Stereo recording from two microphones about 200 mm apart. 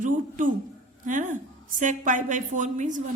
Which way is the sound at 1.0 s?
40° right (ahead or behind).